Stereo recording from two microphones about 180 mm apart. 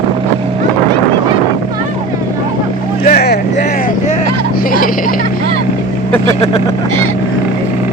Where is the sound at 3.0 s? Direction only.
60° left (ahead or behind).